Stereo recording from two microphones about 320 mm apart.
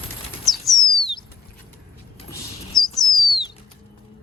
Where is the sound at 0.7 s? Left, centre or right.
Centre.